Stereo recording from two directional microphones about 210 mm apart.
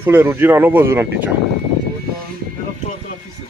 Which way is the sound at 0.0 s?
10° right (ahead or behind).